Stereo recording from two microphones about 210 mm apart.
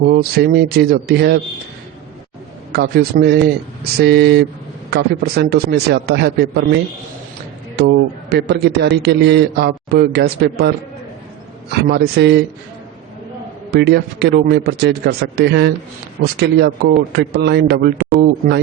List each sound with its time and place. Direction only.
0.1 s a man's voice: 50° right (ahead or behind)
2.7 s a man's voice: 50° right (ahead or behind)
7.8 s a man's voice: 55° right (ahead or behind)
11.7 s a man's voice: 50° right (ahead or behind)
13.7 s a man's voice: 50° right (ahead or behind)